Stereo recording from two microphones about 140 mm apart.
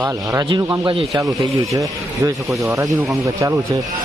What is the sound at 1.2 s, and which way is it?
Speech, 25° right (ahead or behind).